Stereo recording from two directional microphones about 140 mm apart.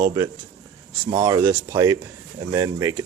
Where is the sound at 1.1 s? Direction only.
25° right (ahead or behind).